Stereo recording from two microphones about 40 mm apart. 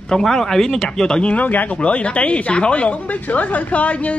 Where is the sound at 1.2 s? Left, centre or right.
Left.